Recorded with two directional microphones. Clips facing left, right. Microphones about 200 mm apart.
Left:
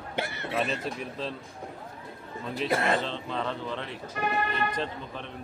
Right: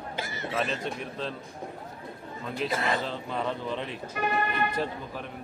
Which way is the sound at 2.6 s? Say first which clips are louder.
Left 3 dB; 55° left (ahead or behind).